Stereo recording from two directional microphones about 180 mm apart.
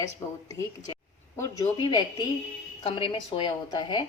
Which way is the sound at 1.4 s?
20° left (ahead or behind).